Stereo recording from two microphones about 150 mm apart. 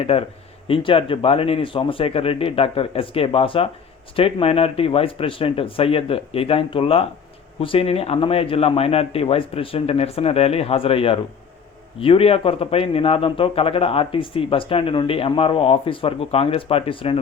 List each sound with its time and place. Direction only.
0.0 s a man's voice: 40° left (ahead or behind)